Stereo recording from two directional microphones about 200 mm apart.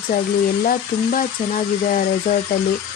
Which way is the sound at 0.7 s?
45° left (ahead or behind).